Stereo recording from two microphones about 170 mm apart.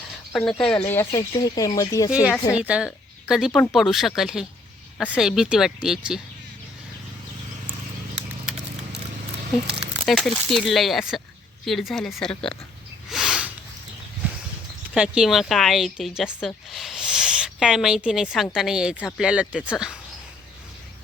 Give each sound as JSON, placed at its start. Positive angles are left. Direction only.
{"t": 0.3, "sound": "a woman's voice", "side_deg": 5}
{"t": 0.9, "sound": "speech", "side_deg": 15}
{"t": 2.0, "sound": "a woman's voice", "side_deg": -5}
{"t": 9.8, "sound": "a woman's voice", "side_deg": 0}
{"t": 13.1, "sound": "a sound", "side_deg": -5}
{"t": 14.9, "sound": "a woman's voice", "side_deg": -5}